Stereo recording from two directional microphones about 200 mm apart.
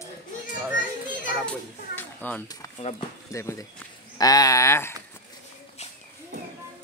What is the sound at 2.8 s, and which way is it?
Speech, 30° left (ahead or behind).